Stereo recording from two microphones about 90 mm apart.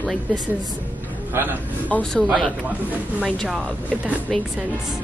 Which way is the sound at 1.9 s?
15° left (ahead or behind).